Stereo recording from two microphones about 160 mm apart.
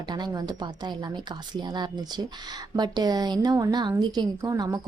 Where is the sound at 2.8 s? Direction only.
25° right (ahead or behind).